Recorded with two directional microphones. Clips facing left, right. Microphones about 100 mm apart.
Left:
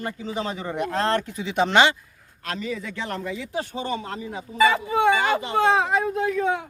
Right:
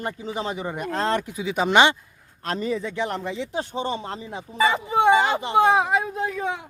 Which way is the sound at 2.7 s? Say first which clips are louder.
Right 4 dB; 20° right (ahead or behind).